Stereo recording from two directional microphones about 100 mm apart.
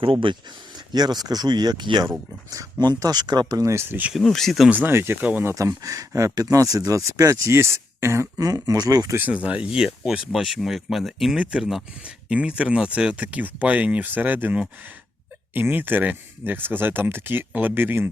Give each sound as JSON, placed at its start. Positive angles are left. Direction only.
{"t": 0.0, "sound": "speech", "side_deg": -60}
{"t": 0.9, "sound": "speech", "side_deg": -45}
{"t": 3.7, "sound": "speech", "side_deg": -25}
{"t": 4.1, "sound": "speech", "side_deg": 5}
{"t": 4.7, "sound": "speech", "side_deg": -20}
{"t": 9.1, "sound": "speech", "side_deg": -15}